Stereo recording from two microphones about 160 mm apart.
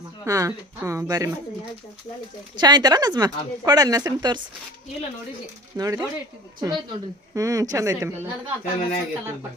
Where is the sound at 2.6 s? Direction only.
25° right (ahead or behind).